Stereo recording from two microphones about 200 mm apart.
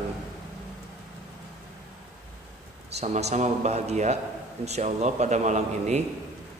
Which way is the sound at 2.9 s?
35° right (ahead or behind).